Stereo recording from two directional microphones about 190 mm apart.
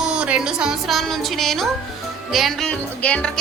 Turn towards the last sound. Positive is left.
turn(degrees=5)  # may be behind; listen again after turning